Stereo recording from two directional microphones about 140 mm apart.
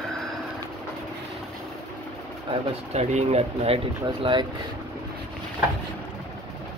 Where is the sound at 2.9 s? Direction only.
55° right (ahead or behind).